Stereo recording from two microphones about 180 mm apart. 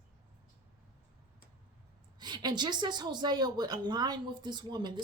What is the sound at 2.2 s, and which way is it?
Speech, 25° right (ahead or behind).